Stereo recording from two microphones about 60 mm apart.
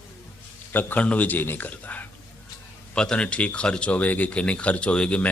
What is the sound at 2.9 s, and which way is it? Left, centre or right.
Speech, centre.